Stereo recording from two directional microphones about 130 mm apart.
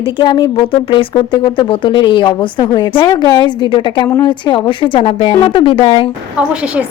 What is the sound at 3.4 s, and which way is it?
Speech, 40° left (ahead or behind).